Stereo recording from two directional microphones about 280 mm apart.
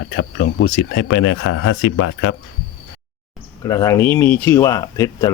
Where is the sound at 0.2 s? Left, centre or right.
Left.